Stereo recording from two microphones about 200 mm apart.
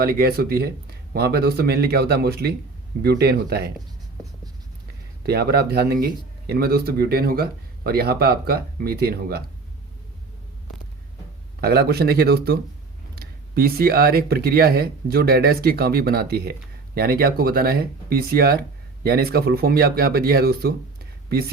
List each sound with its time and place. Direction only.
0.0 s speech: 50° right (ahead or behind)
5.2 s speech: 50° right (ahead or behind)
11.6 s speech: 50° right (ahead or behind)